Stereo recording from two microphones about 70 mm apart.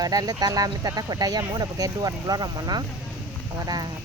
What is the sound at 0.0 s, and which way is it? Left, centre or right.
Speech, right.